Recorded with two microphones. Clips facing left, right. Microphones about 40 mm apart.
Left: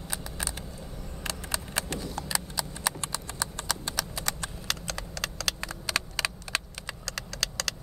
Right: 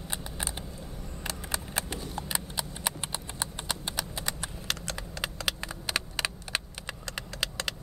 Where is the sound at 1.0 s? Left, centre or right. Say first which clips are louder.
Left 2 dB; right.